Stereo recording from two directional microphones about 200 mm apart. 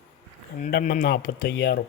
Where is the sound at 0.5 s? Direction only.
40° left (ahead or behind); by 1.8 s 55° left (ahead or behind).